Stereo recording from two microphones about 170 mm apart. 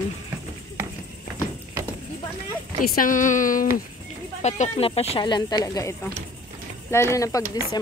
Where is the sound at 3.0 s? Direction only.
50° left (ahead or behind).